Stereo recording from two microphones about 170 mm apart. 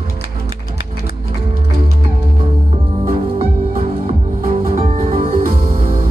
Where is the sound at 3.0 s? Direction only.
40° right (ahead or behind).